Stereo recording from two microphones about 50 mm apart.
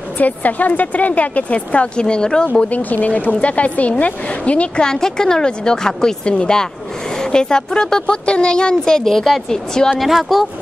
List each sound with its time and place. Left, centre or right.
0.2 s speech: left; by 2.4 s centre
2.7 s speech: left
4.8 s a woman's voice: centre
9.9 s speech: centre